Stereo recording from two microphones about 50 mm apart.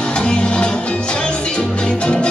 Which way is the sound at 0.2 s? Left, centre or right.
Left.